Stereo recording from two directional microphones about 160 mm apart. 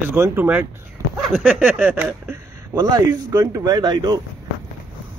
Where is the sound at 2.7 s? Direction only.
25° right (ahead or behind).